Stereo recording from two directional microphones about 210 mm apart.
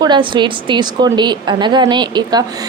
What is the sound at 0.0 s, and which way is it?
A woman's voice, 20° right (ahead or behind).